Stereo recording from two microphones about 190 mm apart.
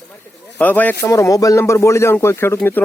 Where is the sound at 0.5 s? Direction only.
10° left (ahead or behind).